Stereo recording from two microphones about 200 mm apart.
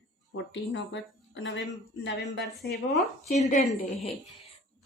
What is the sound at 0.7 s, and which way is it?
A woman's voice, 65° left (ahead or behind).